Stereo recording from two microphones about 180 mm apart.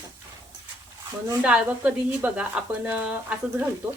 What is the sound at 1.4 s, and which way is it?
Speech, 5° right (ahead or behind).